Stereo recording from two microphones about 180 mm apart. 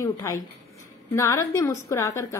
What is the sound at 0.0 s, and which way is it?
A woman's voice, 20° left (ahead or behind).